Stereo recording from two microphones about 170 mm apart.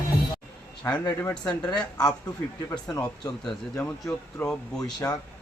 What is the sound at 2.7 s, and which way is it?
Speech, 25° left (ahead or behind).